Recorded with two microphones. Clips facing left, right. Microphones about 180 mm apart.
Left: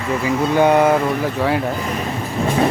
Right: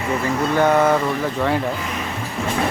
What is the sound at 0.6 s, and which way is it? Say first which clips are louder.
Speech: left 3 dB; 15° left (ahead or behind).